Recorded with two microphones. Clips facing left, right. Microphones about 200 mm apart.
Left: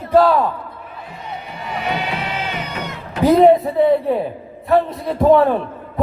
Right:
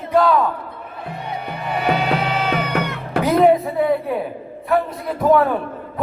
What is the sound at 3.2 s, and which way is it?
A woman's voice, 25° left (ahead or behind).